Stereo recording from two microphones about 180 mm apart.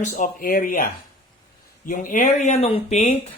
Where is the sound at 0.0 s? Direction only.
50° left (ahead or behind).